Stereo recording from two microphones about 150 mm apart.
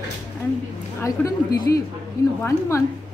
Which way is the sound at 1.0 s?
20° left (ahead or behind).